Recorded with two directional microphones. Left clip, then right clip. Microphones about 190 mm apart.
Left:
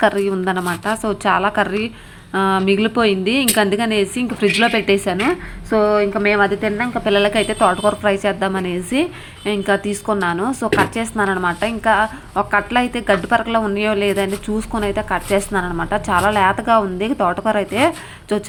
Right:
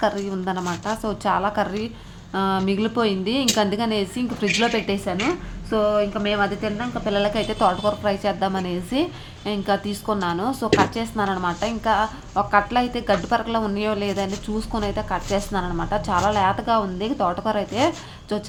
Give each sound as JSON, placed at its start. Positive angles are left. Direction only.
{"t": 0.0, "sound": "a woman's voice", "side_deg": 20}